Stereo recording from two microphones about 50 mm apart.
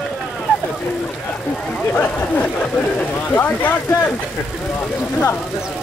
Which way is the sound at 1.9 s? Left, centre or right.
Left.